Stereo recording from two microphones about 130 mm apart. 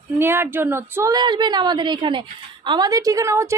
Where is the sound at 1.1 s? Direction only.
35° right (ahead or behind).